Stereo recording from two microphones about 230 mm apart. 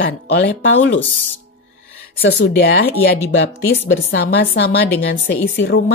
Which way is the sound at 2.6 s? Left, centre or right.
Left.